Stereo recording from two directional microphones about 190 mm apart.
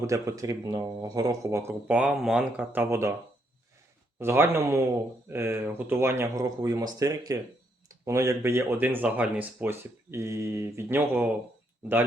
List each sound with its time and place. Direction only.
0.1 s speech: 15° right (ahead or behind)
4.2 s speech: 10° right (ahead or behind)